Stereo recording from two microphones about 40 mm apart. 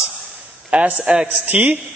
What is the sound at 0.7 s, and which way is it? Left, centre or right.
A man's voice, right.